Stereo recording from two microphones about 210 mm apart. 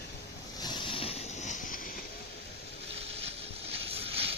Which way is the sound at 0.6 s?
20° left (ahead or behind).